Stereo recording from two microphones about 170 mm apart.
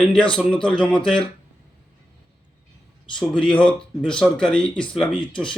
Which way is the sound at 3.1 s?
5° left (ahead or behind).